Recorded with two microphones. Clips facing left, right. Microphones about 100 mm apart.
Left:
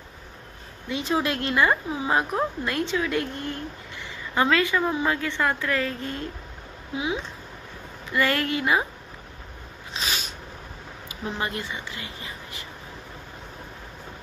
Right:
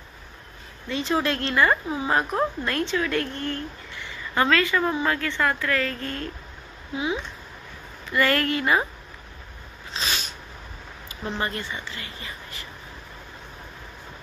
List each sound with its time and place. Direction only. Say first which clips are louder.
0.8 s speech: right 1 dB; 15° left (ahead or behind)
8.1 s speech: right 2 dB; 15° left (ahead or behind)
9.9 s a sound: right 1 dB; 10° left (ahead or behind)
11.1 s speech: right 1 dB; 15° left (ahead or behind)